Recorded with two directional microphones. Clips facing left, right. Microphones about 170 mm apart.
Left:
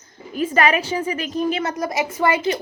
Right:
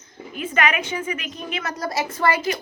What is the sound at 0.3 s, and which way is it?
A woman's voice, 35° left (ahead or behind).